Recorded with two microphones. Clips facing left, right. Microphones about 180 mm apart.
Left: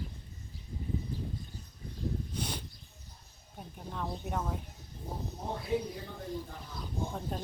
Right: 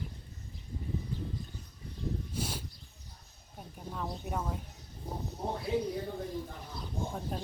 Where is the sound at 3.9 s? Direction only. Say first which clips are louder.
Left 1 dB; 5° right (ahead or behind).